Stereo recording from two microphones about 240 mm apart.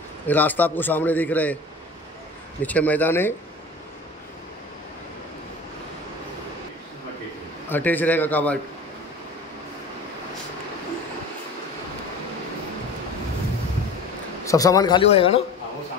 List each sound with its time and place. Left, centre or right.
0.3 s a man's voice: centre
2.6 s a man's voice: centre
7.7 s a man's voice: centre
14.4 s a man's voice: centre